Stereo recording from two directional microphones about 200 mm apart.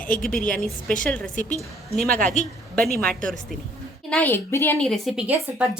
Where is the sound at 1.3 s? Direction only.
40° left (ahead or behind).